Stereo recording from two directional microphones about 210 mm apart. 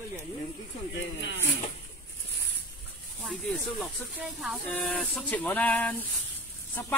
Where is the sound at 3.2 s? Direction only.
Centre (ahead or behind).